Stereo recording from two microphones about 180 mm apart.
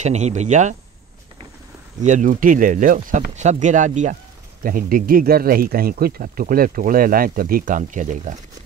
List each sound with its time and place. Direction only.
0.0 s speech: 40° right (ahead or behind)
2.0 s speech: 45° right (ahead or behind)